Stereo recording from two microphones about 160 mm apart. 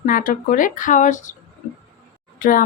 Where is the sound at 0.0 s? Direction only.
60° left (ahead or behind).